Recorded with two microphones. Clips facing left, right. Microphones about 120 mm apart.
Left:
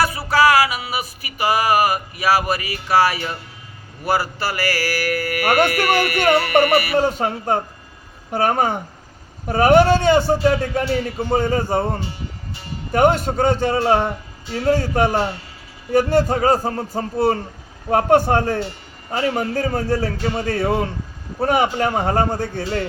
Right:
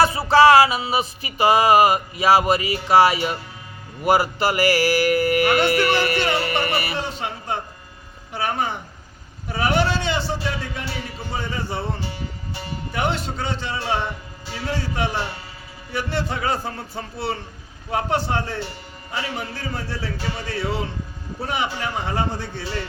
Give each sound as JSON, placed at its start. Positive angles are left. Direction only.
{"t": 0.0, "sound": "music", "side_deg": -25}
{"t": 6.9, "sound": "a man's voice", "side_deg": 45}